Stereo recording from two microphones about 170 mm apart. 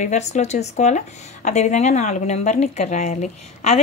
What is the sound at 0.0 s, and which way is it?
Speech, 45° left (ahead or behind).